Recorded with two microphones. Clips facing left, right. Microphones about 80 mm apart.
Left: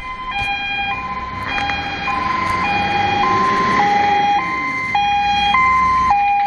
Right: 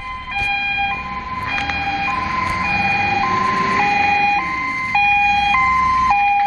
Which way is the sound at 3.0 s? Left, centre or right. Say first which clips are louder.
Left 4 dB; left.